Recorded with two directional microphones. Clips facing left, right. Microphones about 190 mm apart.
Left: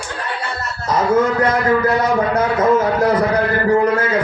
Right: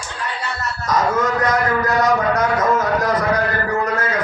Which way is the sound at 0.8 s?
30° left (ahead or behind).